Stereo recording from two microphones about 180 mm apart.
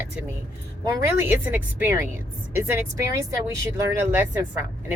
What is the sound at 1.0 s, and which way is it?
Speech, 10° right (ahead or behind).